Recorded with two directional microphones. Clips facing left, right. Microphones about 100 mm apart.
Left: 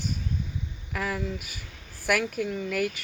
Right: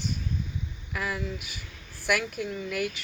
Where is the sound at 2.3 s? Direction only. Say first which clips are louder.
Left 3 dB; 60° left (ahead or behind).